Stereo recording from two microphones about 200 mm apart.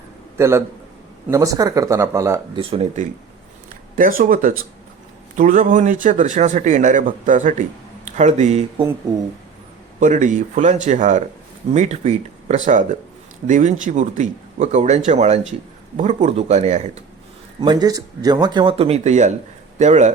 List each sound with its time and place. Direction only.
0.3 s a man's voice: 15° right (ahead or behind)
2.6 s speech: 30° right (ahead or behind)
3.9 s speech: 45° right (ahead or behind)
10.0 s speech: 40° right (ahead or behind)
17.6 s speech: 20° right (ahead or behind); by 20.1 s 35° right (ahead or behind)